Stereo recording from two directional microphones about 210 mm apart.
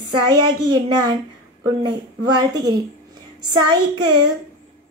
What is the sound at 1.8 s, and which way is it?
Speech, 20° right (ahead or behind).